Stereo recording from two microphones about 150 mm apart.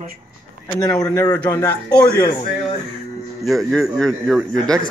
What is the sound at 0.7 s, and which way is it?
A man's voice, 25° left (ahead or behind).